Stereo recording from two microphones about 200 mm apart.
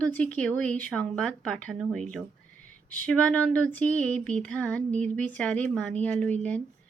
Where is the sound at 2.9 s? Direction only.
5° left (ahead or behind).